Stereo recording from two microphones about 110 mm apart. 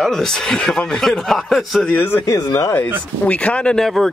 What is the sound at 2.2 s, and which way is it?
Speech, 30° left (ahead or behind).